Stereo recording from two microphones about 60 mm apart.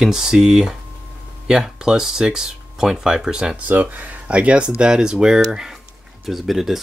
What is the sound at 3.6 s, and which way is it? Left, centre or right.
Speech, right.